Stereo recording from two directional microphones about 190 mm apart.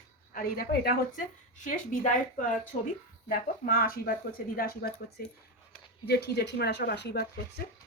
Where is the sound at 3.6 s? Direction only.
50° left (ahead or behind).